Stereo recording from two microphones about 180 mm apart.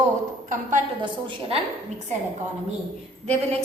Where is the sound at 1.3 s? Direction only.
35° right (ahead or behind).